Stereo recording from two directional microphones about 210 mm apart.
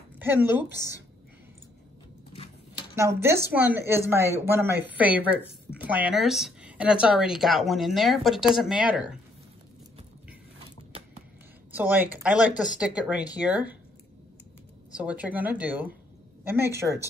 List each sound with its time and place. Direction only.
0.2 s speech: 10° right (ahead or behind)
3.0 s a woman's voice: 15° right (ahead or behind)
10.9 s a sound: 30° right (ahead or behind)
11.7 s a woman's voice: 10° right (ahead or behind)
15.0 s speech: 5° right (ahead or behind)